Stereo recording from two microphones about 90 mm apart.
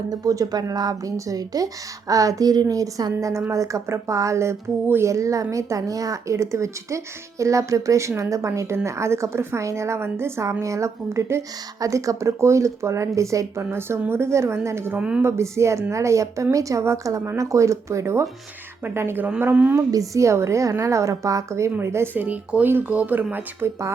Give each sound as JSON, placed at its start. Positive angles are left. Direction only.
{"t": 0.1, "sound": "speech", "side_deg": -45}
{"t": 14.9, "sound": "speech", "side_deg": -10}
{"t": 15.2, "sound": "speech", "side_deg": -30}
{"t": 19.7, "sound": "speech", "side_deg": -35}